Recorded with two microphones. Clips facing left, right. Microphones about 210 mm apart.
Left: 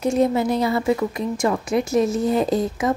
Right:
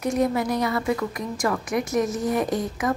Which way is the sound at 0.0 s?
25° left (ahead or behind).